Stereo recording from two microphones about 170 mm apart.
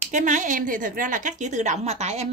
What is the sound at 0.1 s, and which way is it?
A woman's voice, 50° right (ahead or behind).